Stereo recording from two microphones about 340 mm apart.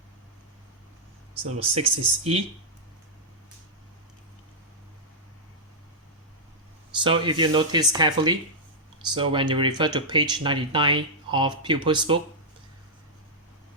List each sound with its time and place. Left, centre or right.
1.5 s speech: centre
7.0 s speech: centre